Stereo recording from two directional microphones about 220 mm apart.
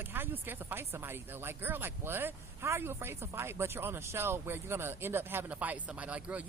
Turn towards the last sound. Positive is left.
turn(degrees=-5)  # may be behind; listen again after turning